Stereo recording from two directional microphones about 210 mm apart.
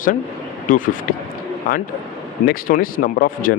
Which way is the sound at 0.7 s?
40° left (ahead or behind).